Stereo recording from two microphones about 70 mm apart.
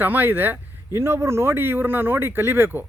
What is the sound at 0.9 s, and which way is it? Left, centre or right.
Speech, right.